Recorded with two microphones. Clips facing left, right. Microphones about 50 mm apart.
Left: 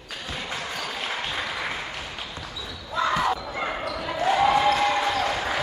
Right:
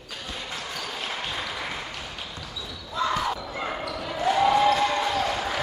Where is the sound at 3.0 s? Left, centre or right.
Left.